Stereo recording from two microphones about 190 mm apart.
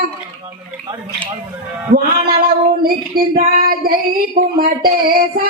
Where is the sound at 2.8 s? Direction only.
50° right (ahead or behind).